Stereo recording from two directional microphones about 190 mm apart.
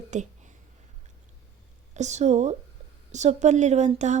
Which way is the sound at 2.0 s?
40° right (ahead or behind).